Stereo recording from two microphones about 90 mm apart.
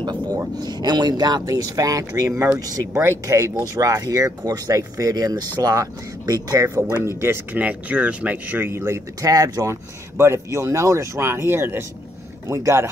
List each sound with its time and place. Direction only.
0.6 s speech: 50° right (ahead or behind)
6.9 s speech: 30° right (ahead or behind)
10.1 s speech: 30° right (ahead or behind)